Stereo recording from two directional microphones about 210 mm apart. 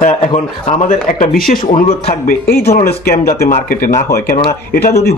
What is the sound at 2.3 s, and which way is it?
Speech, 50° left (ahead or behind).